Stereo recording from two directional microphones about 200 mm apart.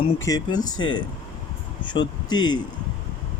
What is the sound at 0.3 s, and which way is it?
Speech, 20° left (ahead or behind).